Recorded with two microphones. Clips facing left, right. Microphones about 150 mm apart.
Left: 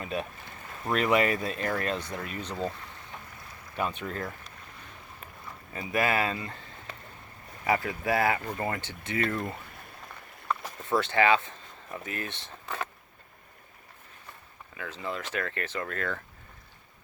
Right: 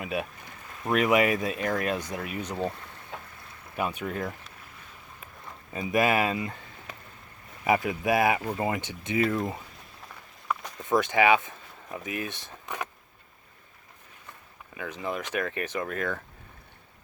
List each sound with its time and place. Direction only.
0.0 s speech: 10° right (ahead or behind)
3.8 s speech: 10° right (ahead or behind)
5.7 s speech: 20° right (ahead or behind)
9.2 s speech: 5° right (ahead or behind)
10.5 s a sound: 10° right (ahead or behind)
10.8 s speech: 15° right (ahead or behind)
14.8 s speech: 15° right (ahead or behind)